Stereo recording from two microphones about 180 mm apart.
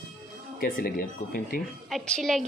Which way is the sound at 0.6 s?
55° left (ahead or behind).